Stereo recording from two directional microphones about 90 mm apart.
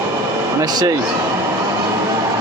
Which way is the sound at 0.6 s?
45° right (ahead or behind).